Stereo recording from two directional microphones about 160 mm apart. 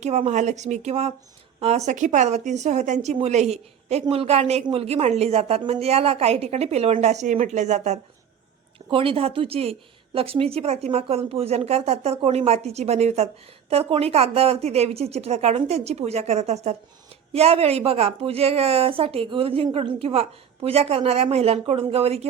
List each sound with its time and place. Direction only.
0.0 s a woman's voice: 45° right (ahead or behind)
8.9 s a woman's voice: 35° right (ahead or behind)